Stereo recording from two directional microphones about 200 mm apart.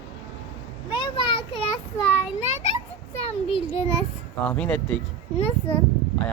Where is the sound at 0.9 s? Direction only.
25° left (ahead or behind).